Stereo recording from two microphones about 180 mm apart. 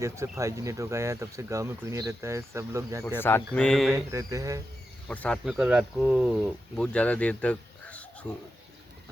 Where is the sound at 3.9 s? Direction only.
15° right (ahead or behind).